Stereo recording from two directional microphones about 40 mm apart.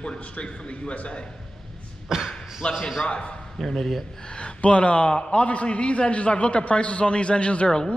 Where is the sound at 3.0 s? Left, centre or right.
Left.